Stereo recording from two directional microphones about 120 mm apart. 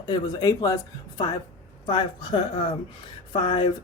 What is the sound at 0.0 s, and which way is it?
Speech, 35° left (ahead or behind).